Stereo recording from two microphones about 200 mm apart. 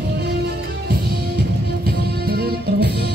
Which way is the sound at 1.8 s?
50° right (ahead or behind).